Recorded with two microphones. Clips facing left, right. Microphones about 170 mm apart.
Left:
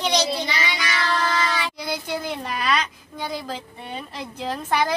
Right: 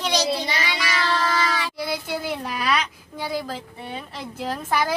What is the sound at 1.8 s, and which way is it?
A child's voice, 5° right (ahead or behind).